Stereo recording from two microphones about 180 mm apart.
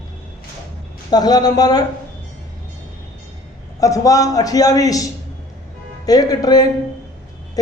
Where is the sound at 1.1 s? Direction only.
20° left (ahead or behind).